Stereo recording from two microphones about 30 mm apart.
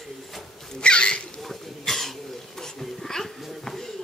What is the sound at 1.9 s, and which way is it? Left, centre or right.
Cough, centre.